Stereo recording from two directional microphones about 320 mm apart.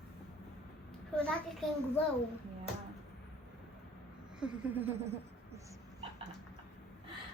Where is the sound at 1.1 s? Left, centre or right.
Centre.